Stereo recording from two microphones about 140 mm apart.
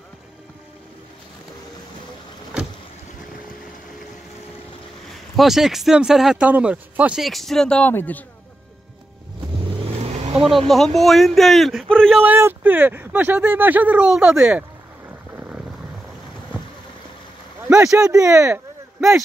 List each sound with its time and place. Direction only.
5.3 s speech: centre (ahead or behind)
9.6 s vehicle: 50° right (ahead or behind)
10.3 s speech: 5° right (ahead or behind)
12.2 s speech: 15° right (ahead or behind)
17.9 s speech: 25° right (ahead or behind)